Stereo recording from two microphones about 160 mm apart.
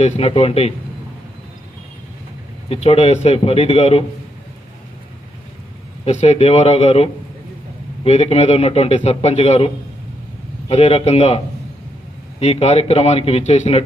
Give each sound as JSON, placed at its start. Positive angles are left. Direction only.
{"t": 0.0, "sound": "a man's voice", "side_deg": 40}
{"t": 2.7, "sound": "a man's voice", "side_deg": 40}
{"t": 6.0, "sound": "a man's voice", "side_deg": 40}
{"t": 10.7, "sound": "a man's voice", "side_deg": 40}